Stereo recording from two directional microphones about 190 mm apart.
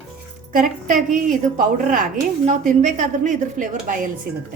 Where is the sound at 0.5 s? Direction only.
45° right (ahead or behind).